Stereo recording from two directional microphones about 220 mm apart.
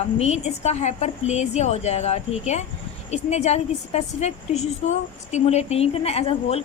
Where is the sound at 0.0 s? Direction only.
30° left (ahead or behind).